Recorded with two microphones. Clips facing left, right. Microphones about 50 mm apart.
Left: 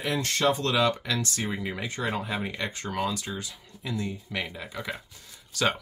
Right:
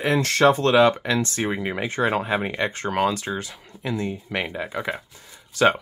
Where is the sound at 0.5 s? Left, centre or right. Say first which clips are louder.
Right 7 dB; right.